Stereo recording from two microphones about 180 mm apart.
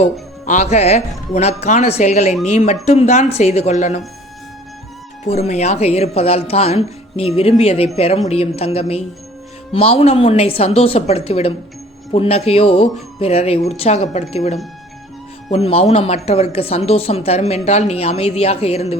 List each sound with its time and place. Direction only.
0.0 s speech: 40° left (ahead or behind)
5.2 s speech: 35° left (ahead or behind)